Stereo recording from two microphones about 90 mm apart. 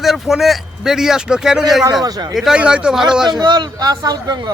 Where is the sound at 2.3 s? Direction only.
Centre (ahead or behind).